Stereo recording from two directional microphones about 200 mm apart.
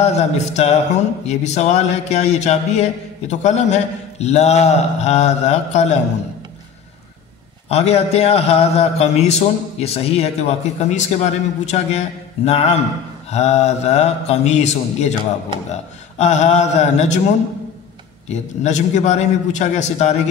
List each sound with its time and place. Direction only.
0.0 s a man's voice: 35° left (ahead or behind)
7.6 s a man's voice: 30° left (ahead or behind)
18.3 s a man's voice: 35° left (ahead or behind)